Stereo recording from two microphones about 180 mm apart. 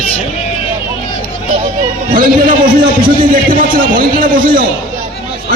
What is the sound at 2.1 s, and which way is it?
A man's voice, 50° right (ahead or behind).